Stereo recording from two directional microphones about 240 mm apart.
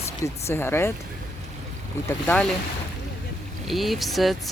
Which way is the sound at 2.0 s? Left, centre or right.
Centre.